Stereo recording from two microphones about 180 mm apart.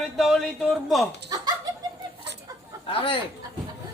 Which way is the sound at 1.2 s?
20° right (ahead or behind).